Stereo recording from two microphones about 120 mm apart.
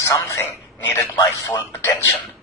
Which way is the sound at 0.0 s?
30° left (ahead or behind).